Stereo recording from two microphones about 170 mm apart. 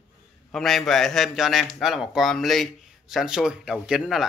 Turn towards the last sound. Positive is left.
turn(degrees=0)  # may be behind; listen again after turning